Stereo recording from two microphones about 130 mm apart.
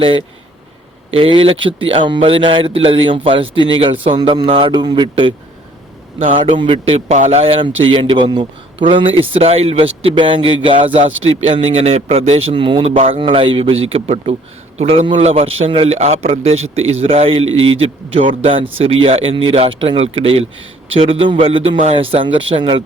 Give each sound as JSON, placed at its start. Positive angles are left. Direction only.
{"t": 1.1, "sound": "a man's voice", "side_deg": -45}
{"t": 11.0, "sound": "a man's voice", "side_deg": -55}